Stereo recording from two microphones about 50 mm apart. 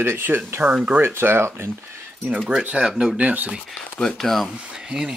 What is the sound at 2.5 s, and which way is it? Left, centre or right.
Speech, right.